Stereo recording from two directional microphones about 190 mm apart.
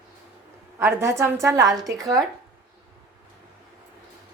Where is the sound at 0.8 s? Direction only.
15° right (ahead or behind).